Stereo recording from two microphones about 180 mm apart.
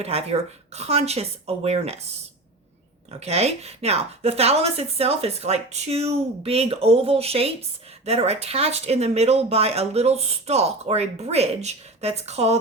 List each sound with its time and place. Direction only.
0.0 s speech: 35° right (ahead or behind)
3.1 s speech: 35° right (ahead or behind)